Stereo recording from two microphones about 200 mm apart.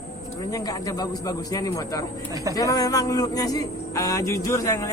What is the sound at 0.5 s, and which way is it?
Speech, 15° left (ahead or behind).